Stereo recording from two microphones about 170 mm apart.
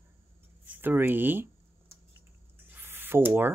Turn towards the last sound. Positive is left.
turn(degrees=-10)  # may be behind; listen again after turning